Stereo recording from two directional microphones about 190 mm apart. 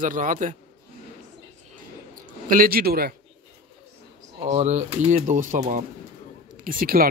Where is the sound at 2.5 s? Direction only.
50° right (ahead or behind).